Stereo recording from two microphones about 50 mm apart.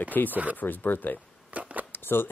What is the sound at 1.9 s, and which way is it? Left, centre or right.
Shuffling cards, left.